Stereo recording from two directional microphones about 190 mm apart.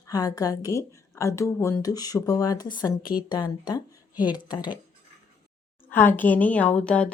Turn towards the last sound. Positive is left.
turn(degrees=5)  # may be behind; listen again after turning